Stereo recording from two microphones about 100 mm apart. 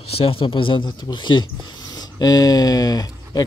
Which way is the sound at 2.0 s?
40° left (ahead or behind).